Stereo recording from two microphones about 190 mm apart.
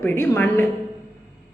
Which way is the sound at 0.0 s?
10° left (ahead or behind).